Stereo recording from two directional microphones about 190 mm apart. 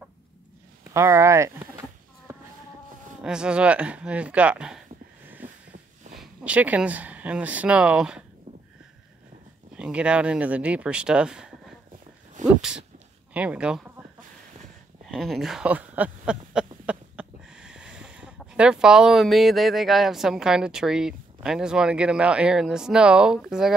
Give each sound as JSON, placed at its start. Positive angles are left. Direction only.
{"t": 0.9, "sound": "speech", "side_deg": -15}
{"t": 3.2, "sound": "speech", "side_deg": -5}
{"t": 6.1, "sound": "speech", "side_deg": -5}
{"t": 9.8, "sound": "speech", "side_deg": -5}
{"t": 12.4, "sound": "sneeze", "side_deg": -40}
{"t": 13.3, "sound": "speech", "side_deg": -5}
{"t": 15.0, "sound": "speech", "side_deg": 0}